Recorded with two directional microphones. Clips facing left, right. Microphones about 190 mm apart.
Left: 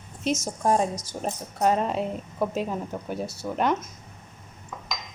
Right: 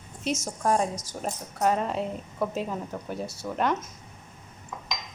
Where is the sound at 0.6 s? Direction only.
25° left (ahead or behind).